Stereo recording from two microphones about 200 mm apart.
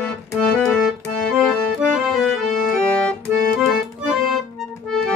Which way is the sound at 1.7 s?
Centre (ahead or behind).